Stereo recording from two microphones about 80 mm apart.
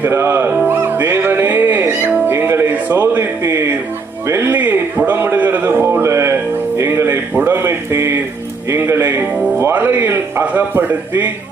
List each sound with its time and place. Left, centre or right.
0.0 s speech: right
0.6 s music: right
2.7 s a sound: right
4.3 s speech: right
4.5 s a sound: right
6.7 s music: right
9.3 s music: centre
9.7 s music: right
10.4 s speech: centre